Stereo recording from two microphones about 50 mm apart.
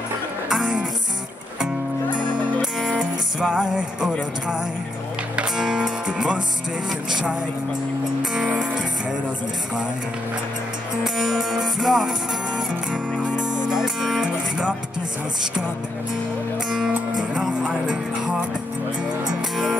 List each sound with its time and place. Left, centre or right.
0.5 s music: centre
2.9 s music: centre
5.3 s speech: centre
8.5 s speech: centre
11.1 s speech: centre
13.2 s speech: centre
17.2 s speech: centre
19.5 s speech: centre